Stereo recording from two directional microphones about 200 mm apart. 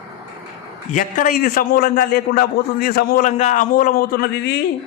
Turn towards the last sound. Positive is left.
turn(degrees=50)  # may be behind; listen again after turning